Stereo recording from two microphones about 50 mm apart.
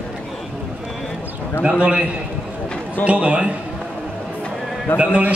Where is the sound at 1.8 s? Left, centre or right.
Right.